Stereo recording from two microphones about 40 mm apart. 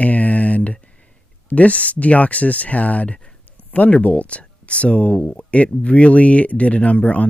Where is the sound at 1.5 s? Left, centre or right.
Left.